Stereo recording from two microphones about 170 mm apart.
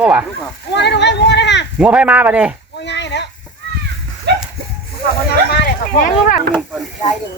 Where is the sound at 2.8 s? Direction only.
90° left.